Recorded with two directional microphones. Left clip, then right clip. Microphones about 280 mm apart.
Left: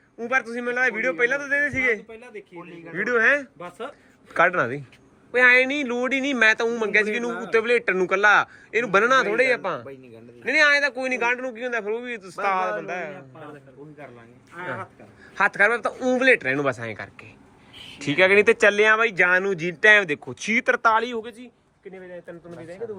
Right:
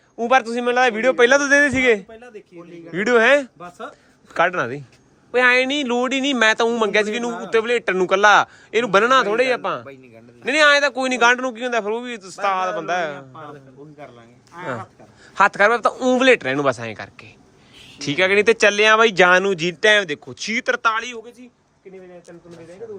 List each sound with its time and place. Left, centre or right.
0.2 s speech: centre
14.6 s speech: centre
20.9 s speech: centre